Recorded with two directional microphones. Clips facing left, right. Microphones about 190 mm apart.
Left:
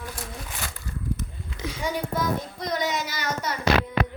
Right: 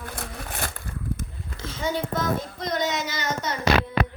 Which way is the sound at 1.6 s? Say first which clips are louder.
Right 1 dB; 10° left (ahead or behind).